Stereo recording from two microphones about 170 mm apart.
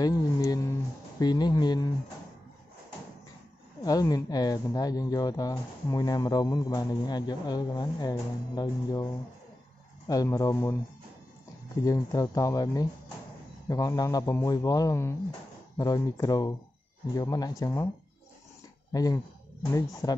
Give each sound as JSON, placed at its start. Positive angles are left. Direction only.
{"t": 0.0, "sound": "a sound", "side_deg": 20}
{"t": 1.2, "sound": "speech", "side_deg": 25}
{"t": 3.8, "sound": "speech", "side_deg": 20}
{"t": 11.8, "sound": "speech", "side_deg": 20}
{"t": 18.9, "sound": "speech", "side_deg": 20}